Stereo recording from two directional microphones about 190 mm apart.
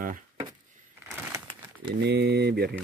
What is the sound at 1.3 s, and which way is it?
Crumpling, 25° right (ahead or behind).